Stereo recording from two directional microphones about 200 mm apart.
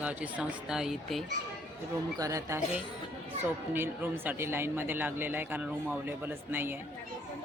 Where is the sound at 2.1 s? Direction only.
15° right (ahead or behind).